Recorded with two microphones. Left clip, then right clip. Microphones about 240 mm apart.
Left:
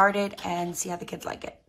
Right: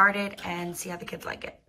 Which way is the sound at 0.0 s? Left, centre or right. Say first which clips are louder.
Even; centre.